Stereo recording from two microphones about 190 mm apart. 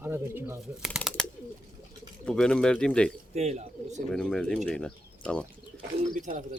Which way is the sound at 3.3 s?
35° right (ahead or behind).